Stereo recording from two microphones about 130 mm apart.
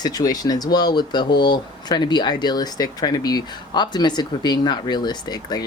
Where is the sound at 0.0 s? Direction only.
30° left (ahead or behind).